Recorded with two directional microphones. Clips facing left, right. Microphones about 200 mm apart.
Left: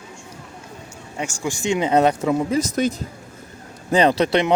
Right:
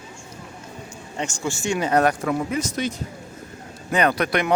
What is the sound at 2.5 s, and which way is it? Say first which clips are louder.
Speech: left 5 dB; 45° left (ahead or behind).